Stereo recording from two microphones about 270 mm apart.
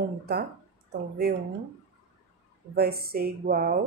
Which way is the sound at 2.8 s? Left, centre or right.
Right.